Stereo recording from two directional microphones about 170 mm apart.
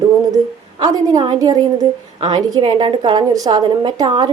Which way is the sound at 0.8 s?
25° right (ahead or behind).